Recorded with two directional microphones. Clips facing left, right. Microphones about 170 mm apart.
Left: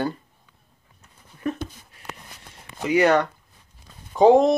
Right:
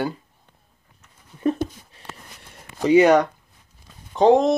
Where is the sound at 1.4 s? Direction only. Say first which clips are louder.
Right 6 dB; 25° right (ahead or behind).